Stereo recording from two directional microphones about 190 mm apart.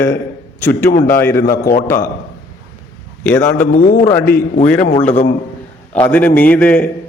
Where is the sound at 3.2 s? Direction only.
10° left (ahead or behind).